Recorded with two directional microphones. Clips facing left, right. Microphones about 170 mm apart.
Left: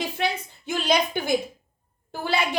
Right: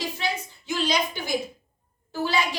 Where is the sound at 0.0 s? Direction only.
55° left (ahead or behind).